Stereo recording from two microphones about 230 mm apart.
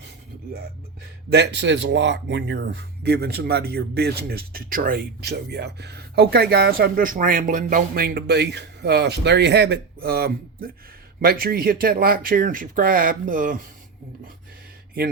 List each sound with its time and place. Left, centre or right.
1.3 s speech: right